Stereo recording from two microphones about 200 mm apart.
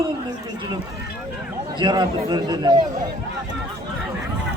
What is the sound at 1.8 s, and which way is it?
Speech, 20° right (ahead or behind).